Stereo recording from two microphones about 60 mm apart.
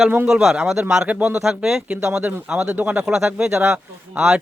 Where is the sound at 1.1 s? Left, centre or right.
Right.